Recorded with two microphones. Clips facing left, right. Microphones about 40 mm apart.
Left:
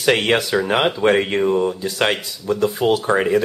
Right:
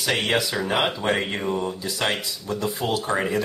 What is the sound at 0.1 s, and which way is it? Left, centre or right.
Speech, left.